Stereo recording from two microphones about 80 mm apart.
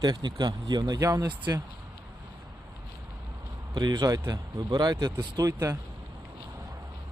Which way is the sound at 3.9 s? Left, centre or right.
Right.